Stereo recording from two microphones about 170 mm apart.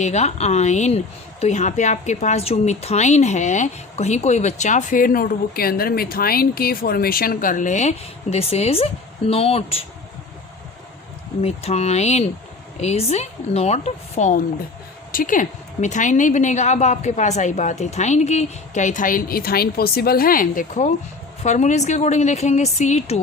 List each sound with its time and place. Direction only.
0.0 s speech: 40° left (ahead or behind)
11.4 s speech: 40° left (ahead or behind)